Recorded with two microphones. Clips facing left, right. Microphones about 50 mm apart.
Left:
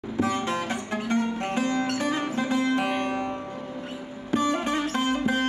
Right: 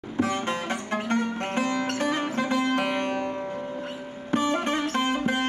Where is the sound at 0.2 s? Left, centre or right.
Right.